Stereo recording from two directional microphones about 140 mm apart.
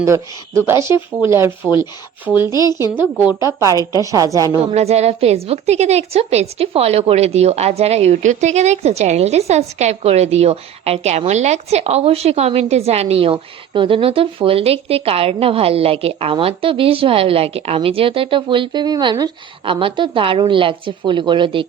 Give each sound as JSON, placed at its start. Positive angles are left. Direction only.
{"t": 0.0, "sound": "speech", "side_deg": -20}
{"t": 4.7, "sound": "a woman's voice", "side_deg": -50}